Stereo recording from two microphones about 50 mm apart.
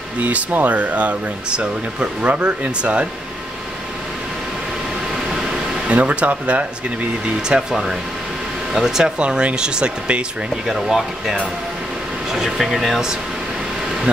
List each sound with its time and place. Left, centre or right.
0.2 s speech: right
5.9 s speech: right
7.4 s speech: centre
9.2 s speech: right
10.7 s speech: centre